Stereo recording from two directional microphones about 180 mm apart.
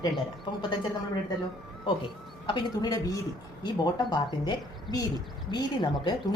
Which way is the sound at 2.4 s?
25° left (ahead or behind).